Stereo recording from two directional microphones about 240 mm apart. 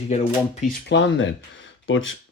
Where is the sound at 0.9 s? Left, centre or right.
Left.